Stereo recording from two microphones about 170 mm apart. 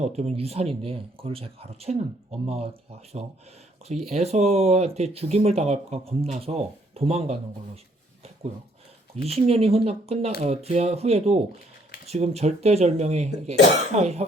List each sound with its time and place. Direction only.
0.0 s speech: 40° right (ahead or behind)
3.2 s speech: 35° right (ahead or behind)
9.2 s speech: 35° right (ahead or behind)